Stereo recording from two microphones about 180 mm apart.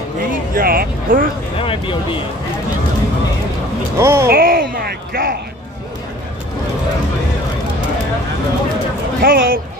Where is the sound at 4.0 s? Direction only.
15° right (ahead or behind).